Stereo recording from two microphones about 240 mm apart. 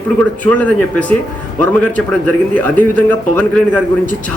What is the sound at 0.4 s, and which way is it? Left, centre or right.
A man's voice, centre.